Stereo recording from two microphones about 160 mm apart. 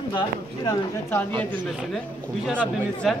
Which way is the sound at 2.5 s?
10° right (ahead or behind).